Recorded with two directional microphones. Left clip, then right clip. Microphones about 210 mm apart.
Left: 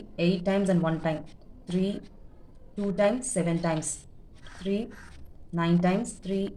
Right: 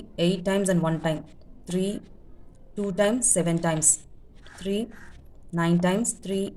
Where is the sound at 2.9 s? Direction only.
40° right (ahead or behind).